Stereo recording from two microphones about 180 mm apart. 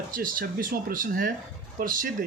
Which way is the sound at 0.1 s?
50° right (ahead or behind).